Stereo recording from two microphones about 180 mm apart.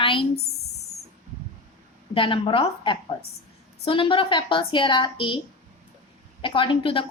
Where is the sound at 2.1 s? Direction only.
30° left (ahead or behind).